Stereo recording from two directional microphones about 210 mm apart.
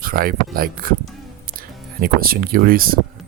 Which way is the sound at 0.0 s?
45° right (ahead or behind).